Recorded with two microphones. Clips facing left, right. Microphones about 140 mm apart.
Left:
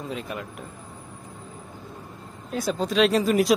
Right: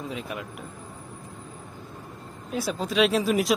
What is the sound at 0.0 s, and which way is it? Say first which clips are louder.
Speech: left 1 dB; centre (ahead or behind).